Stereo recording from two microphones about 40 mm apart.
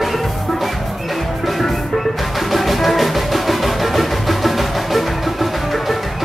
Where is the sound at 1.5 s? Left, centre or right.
Centre.